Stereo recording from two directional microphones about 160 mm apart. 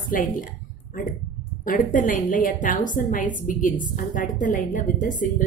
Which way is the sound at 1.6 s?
60° left (ahead or behind).